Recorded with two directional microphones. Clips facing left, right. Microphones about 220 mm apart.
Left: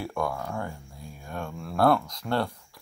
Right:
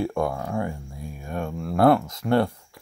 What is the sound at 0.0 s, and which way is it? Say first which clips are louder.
Speech: right 5 dB; 25° right (ahead or behind).